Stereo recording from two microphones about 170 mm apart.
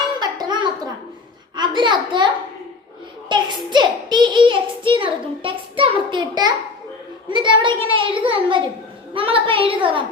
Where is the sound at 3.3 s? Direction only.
25° right (ahead or behind).